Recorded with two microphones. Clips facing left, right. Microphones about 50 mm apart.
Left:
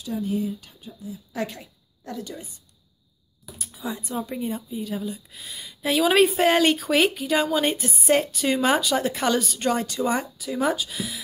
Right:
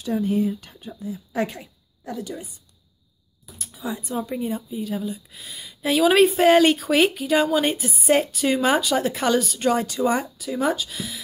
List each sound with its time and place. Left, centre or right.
0.0 s speech: right
1.3 s a woman's voice: right
3.5 s speech: centre